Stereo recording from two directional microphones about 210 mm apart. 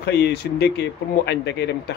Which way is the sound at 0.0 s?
50° left (ahead or behind).